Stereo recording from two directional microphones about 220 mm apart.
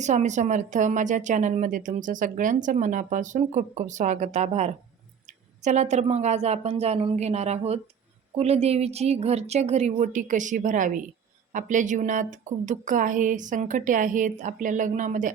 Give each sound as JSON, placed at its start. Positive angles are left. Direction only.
{"t": 0.0, "sound": "a woman's voice", "side_deg": -35}